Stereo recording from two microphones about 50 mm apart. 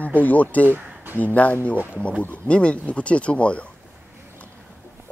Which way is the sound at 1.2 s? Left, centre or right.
Left.